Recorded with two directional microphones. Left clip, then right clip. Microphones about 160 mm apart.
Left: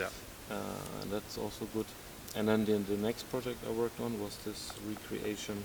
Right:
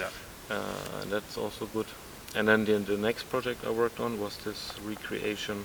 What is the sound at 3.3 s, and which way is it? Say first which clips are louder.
Speech: right 6 dB; 20° right (ahead or behind).